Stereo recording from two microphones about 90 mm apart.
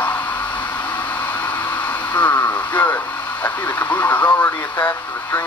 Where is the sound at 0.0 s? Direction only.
15° left (ahead or behind).